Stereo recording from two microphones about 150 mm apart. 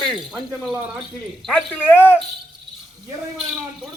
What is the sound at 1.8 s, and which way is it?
Speech, 10° left (ahead or behind).